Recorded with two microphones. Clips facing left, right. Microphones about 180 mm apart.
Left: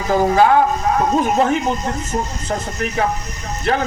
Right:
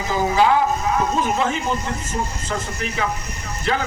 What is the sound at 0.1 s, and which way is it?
A man's voice, 55° left (ahead or behind).